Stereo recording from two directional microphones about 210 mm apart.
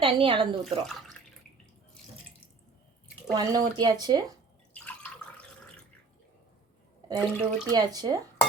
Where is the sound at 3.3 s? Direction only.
20° right (ahead or behind).